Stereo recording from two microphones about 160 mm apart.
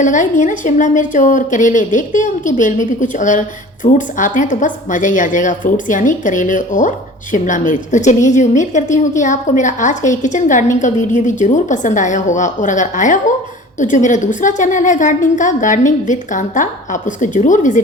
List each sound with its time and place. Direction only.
0.0 s a woman's voice: 50° left (ahead or behind)